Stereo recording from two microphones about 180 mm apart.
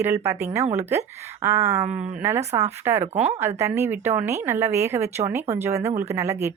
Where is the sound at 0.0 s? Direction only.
15° right (ahead or behind).